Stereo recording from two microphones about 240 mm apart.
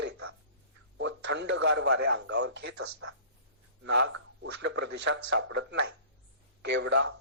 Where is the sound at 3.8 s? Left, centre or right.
Right.